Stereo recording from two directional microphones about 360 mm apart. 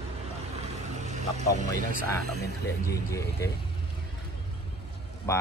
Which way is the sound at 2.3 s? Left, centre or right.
Left.